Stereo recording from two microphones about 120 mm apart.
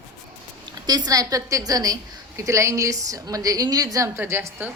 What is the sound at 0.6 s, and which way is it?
A woman's voice, 35° right (ahead or behind).